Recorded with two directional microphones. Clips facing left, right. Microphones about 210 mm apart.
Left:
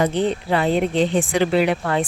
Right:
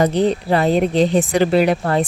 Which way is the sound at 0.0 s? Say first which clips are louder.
Right 4 dB; 40° right (ahead or behind).